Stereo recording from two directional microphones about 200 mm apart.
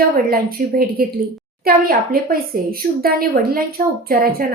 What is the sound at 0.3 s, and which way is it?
A woman's voice, 50° right (ahead or behind).